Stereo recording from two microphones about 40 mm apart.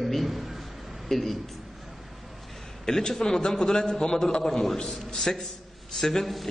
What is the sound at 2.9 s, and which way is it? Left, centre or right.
A man's voice, centre.